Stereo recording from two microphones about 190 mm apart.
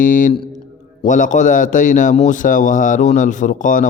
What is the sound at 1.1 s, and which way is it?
A man's voice, 40° left (ahead or behind).